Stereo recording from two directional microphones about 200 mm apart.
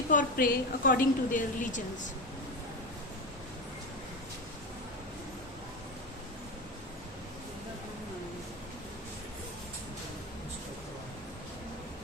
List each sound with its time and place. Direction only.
0.1 s a woman's voice: 45° left (ahead or behind)